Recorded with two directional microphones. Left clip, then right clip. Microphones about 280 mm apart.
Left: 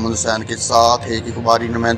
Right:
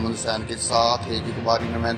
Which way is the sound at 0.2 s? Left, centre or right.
Left.